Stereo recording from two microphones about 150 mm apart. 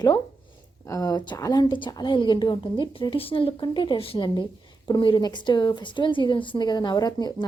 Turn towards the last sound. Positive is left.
turn(degrees=25)  # may be behind; listen again after turning